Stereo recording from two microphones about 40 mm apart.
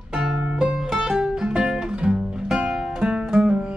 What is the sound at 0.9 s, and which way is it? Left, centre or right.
Music, centre.